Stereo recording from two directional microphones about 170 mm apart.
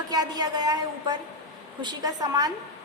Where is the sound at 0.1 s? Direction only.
25° right (ahead or behind).